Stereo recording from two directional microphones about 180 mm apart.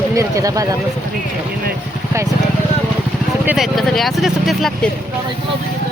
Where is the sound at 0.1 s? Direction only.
20° right (ahead or behind).